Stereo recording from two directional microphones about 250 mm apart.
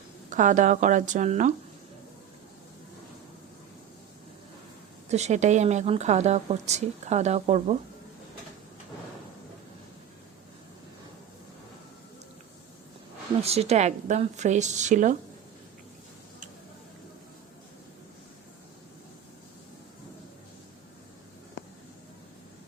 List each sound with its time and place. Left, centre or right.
0.3 s speech: right
5.0 s speech: right
13.4 s speech: right